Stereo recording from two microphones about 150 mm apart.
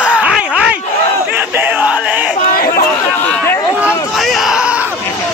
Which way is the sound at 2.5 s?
80° left.